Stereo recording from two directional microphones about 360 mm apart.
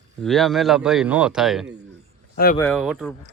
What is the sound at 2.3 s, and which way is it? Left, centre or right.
Speech, left.